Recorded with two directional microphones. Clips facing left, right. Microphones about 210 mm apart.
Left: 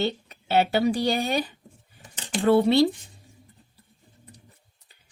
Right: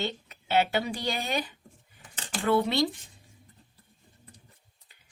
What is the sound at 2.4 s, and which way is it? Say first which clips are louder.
Speech: left 7 dB; 30° left (ahead or behind).